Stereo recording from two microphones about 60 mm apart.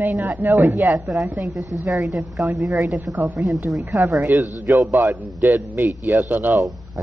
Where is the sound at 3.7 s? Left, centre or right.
Right.